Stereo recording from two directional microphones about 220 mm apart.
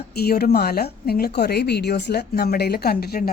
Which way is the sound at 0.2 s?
45° left (ahead or behind).